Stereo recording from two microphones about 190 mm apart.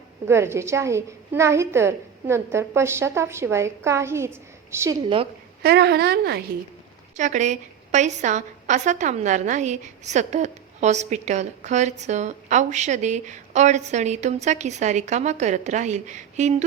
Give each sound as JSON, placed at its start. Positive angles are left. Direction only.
{"t": 0.3, "sound": "a woman's voice", "side_deg": -15}
{"t": 5.6, "sound": "a woman's voice", "side_deg": -60}
{"t": 7.2, "sound": "a woman's voice", "side_deg": -40}